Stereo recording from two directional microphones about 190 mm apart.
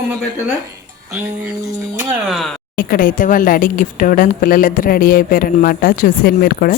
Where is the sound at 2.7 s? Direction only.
50° left (ahead or behind).